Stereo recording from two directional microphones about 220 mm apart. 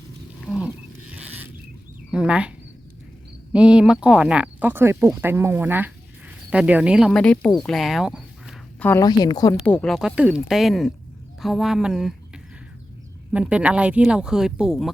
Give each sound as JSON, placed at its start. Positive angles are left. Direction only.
{"t": 0.4, "sound": "a sound", "side_deg": -5}
{"t": 2.0, "sound": "speech", "side_deg": -5}
{"t": 3.5, "sound": "speech", "side_deg": -5}
{"t": 7.6, "sound": "a sound", "side_deg": 0}
{"t": 8.9, "sound": "a woman's voice", "side_deg": 15}
{"t": 9.6, "sound": "speech", "side_deg": 5}